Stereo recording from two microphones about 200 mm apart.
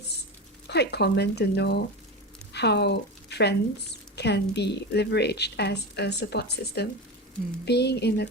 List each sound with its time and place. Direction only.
0.7 s a woman's voice: 55° left (ahead or behind)